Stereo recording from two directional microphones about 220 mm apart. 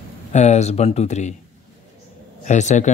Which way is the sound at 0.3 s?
30° left (ahead or behind).